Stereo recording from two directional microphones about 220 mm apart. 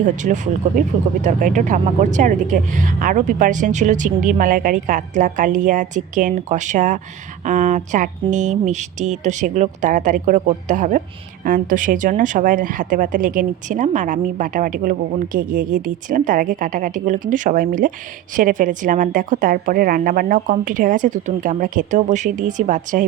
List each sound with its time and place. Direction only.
0.0 s speech: 35° right (ahead or behind)